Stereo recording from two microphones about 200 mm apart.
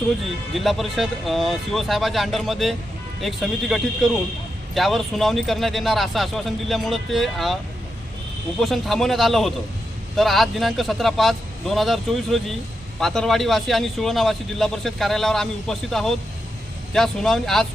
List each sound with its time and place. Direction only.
0.5 s a man's voice: centre (ahead or behind)
8.6 s a man's voice: centre (ahead or behind)